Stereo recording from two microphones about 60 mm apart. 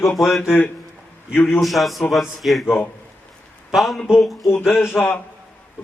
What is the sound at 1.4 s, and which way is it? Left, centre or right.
Speech, left.